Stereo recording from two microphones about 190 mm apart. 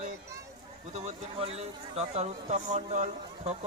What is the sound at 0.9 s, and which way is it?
Speech, 35° right (ahead or behind).